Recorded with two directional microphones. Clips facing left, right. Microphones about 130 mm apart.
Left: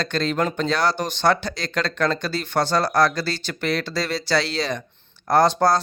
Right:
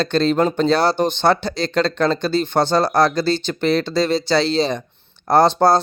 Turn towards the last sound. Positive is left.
turn(degrees=-30)  # may be behind; listen again after turning